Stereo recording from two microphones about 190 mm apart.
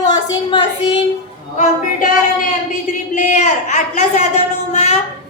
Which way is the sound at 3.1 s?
40° left (ahead or behind).